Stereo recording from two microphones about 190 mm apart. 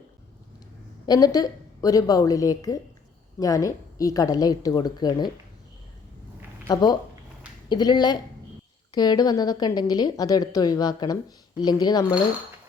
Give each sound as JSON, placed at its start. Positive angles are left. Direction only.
{"t": 1.0, "sound": "a woman's voice", "side_deg": 20}
{"t": 6.7, "sound": "a woman's voice", "side_deg": 20}